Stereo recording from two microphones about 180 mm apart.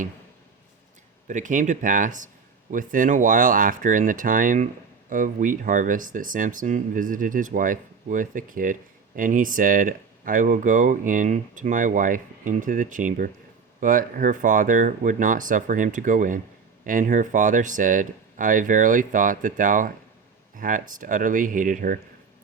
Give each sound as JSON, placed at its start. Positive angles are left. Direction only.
{"t": 1.3, "sound": "speech", "side_deg": -45}